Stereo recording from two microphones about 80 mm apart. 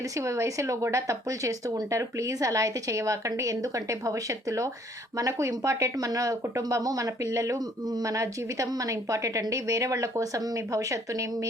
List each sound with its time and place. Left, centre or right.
0.2 s speech: right